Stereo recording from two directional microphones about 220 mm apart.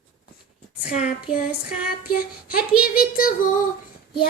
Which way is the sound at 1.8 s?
40° left (ahead or behind).